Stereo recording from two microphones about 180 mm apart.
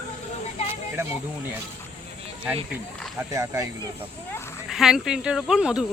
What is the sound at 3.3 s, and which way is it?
Speech, 15° right (ahead or behind).